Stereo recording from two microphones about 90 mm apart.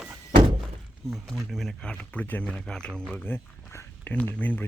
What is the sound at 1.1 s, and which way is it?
Speech, centre (ahead or behind).